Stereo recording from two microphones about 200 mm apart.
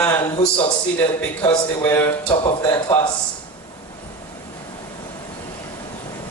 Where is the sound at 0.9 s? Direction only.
10° left (ahead or behind).